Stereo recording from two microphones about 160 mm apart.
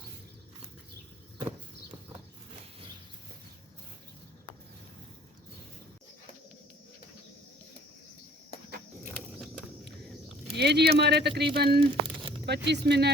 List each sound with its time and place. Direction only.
10.5 s speech: 90° right
11.8 s a sound: 30° right (ahead or behind)
12.5 s speech: 90° right